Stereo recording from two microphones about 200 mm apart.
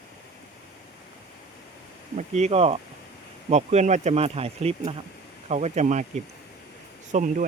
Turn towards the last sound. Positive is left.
turn(degrees=-40)  # may be behind; listen again after turning